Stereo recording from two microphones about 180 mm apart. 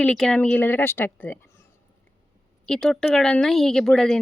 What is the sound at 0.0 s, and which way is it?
Speech, 5° left (ahead or behind).